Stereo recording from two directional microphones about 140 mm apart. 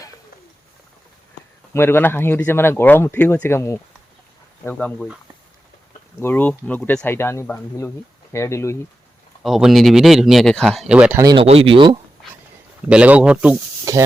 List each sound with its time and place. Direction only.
1.7 s speech: 15° left (ahead or behind)
6.1 s speech: 15° left (ahead or behind)
9.4 s speech: centre (ahead or behind)
10.9 s speech: 10° right (ahead or behind)
11.3 s speech: 40° right (ahead or behind)
12.9 s speech: 10° right (ahead or behind)
13.9 s speech: 20° right (ahead or behind)